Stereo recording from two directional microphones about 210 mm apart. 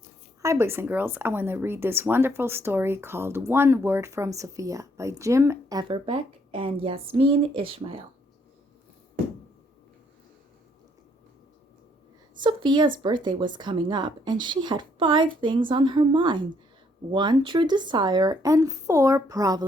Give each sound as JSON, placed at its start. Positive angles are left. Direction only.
{"t": 0.4, "sound": "speech", "side_deg": -15}
{"t": 12.4, "sound": "a woman's voice", "side_deg": -20}